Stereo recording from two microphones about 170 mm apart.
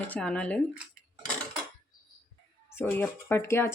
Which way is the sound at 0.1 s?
5° left (ahead or behind).